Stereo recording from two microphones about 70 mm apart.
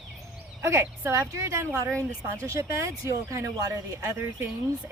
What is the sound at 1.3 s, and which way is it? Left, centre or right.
Speech, right.